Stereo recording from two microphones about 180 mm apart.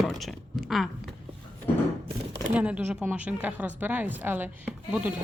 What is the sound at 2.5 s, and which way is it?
A woman's voice, 5° right (ahead or behind).